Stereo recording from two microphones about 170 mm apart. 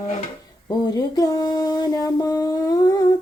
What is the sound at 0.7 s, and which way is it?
Mantra, 25° left (ahead or behind).